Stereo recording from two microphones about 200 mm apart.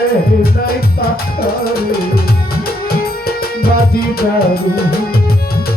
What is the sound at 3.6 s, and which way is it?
Music, 50° left (ahead or behind).